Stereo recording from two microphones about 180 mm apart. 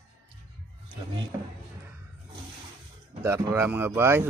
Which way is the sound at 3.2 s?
15° right (ahead or behind).